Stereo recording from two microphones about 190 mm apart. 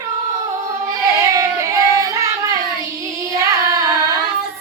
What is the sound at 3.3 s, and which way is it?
Singing, 15° right (ahead or behind).